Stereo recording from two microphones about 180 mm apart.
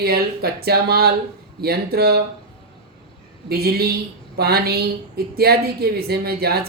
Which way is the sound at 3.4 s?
60° right (ahead or behind).